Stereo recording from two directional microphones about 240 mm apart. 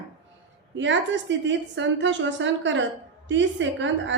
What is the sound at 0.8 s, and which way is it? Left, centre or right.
A woman's voice, right.